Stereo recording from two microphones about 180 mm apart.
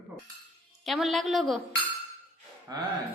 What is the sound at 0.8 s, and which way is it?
Speech, centre (ahead or behind).